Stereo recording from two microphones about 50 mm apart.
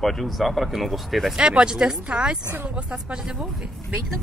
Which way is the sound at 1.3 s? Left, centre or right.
Centre.